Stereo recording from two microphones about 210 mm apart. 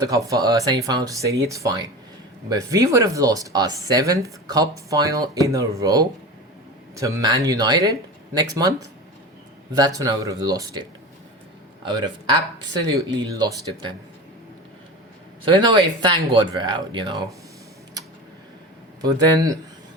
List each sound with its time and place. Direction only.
0.0 s speech: 15° right (ahead or behind)
9.7 s speech: 15° right (ahead or behind)
11.9 s speech: 20° right (ahead or behind)
15.6 s speech: 20° right (ahead or behind)
19.0 s speech: 15° right (ahead or behind)